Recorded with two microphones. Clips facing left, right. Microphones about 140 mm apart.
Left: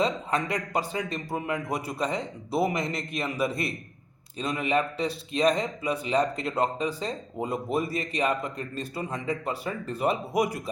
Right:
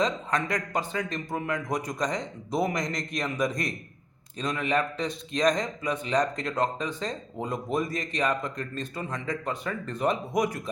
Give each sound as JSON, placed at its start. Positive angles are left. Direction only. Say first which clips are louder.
{"t": 0.0, "sound": "a man's voice", "louder": "left 1 dB", "side_deg": 10}